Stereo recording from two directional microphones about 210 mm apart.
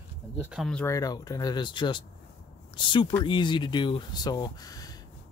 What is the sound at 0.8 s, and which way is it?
Speech, 15° left (ahead or behind).